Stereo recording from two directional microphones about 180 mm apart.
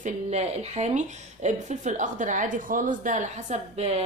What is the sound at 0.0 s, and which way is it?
A woman's voice, 40° right (ahead or behind).